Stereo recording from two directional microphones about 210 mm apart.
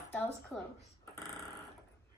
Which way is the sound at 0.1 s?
5° left (ahead or behind).